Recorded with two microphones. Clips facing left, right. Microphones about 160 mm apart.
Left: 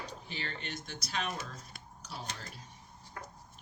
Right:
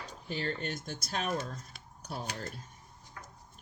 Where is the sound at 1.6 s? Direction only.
Centre (ahead or behind).